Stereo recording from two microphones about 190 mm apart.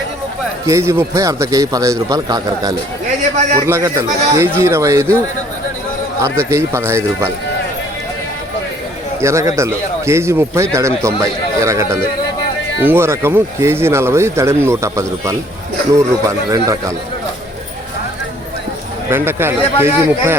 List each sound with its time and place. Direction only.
0.7 s speech: 15° right (ahead or behind)
6.1 s a man's voice: 15° right (ahead or behind)
9.2 s speech: 15° right (ahead or behind)
19.1 s speech: 10° right (ahead or behind)